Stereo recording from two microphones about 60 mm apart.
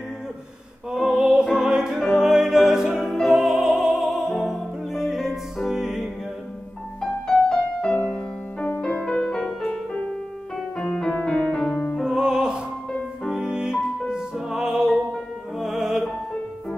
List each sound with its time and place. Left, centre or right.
0.9 s music: centre
7.0 s music: centre
10.8 s music: centre
12.0 s music: centre